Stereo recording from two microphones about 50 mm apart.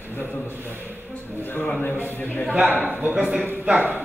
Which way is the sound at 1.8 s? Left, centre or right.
Left.